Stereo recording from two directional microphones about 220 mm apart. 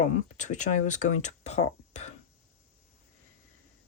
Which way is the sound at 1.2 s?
30° left (ahead or behind).